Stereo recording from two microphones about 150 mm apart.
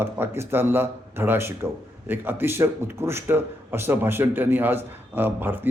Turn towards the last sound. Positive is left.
turn(degrees=-10)  # may be behind; listen again after turning